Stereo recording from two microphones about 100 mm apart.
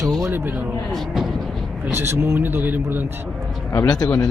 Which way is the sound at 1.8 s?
20° right (ahead or behind).